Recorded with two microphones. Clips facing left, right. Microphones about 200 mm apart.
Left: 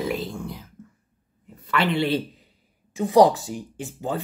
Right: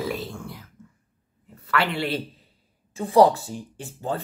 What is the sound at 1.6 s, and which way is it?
Speech, 20° left (ahead or behind).